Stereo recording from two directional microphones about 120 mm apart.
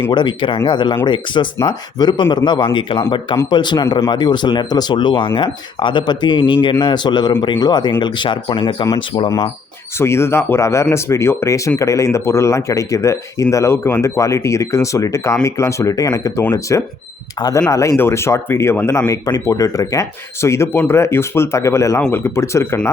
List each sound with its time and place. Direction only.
0.1 s speech: 40° left (ahead or behind)
10.0 s speech: 20° left (ahead or behind)